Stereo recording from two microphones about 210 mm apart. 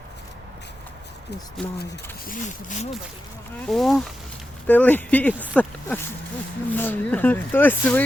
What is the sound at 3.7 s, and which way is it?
Speech, centre (ahead or behind).